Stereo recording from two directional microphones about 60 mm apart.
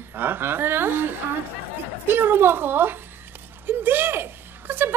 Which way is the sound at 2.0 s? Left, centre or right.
Right.